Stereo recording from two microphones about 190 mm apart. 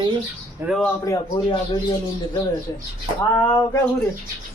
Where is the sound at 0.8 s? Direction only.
15° left (ahead or behind).